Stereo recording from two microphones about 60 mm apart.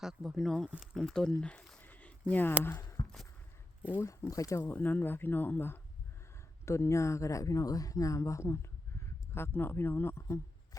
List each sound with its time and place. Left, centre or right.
0.0 s speech: centre
1.0 s speech: centre
1.8 s a sound: left
2.3 s speech: left
4.0 s speech: left
4.6 s speech: left
6.7 s speech: left